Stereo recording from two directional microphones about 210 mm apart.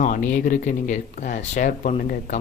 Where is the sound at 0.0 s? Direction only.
40° left (ahead or behind).